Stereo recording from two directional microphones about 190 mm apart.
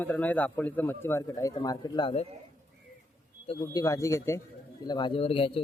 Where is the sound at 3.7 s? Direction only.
20° left (ahead or behind).